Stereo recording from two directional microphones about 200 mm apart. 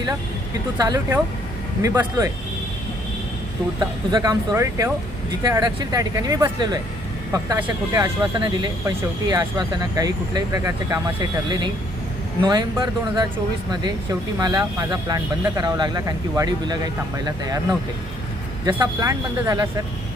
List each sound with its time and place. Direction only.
0.8 s speech: 15° right (ahead or behind)
3.8 s speech: 20° right (ahead or behind)
12.4 s speech: 20° right (ahead or behind)